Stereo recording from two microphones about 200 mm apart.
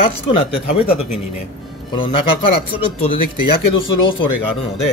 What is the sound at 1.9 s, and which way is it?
Speech, 25° left (ahead or behind).